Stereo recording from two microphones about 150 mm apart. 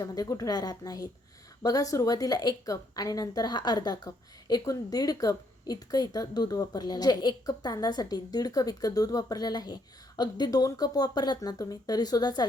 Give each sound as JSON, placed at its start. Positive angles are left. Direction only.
{"t": 0.0, "sound": "a woman's voice", "side_deg": 25}